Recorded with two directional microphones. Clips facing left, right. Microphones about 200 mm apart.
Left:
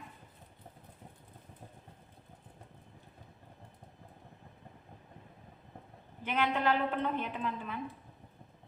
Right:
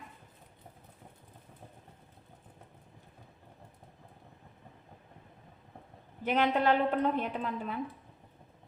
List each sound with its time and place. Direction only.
6.2 s a woman's voice: 40° right (ahead or behind)